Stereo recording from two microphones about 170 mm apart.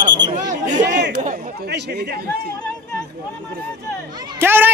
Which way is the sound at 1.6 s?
80° right.